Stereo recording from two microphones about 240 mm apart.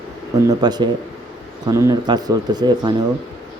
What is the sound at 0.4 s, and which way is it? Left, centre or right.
A man's voice, centre.